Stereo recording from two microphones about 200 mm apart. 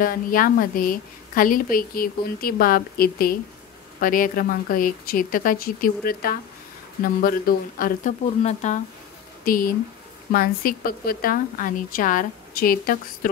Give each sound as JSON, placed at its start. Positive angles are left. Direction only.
{"t": 0.0, "sound": "a woman's voice", "side_deg": 45}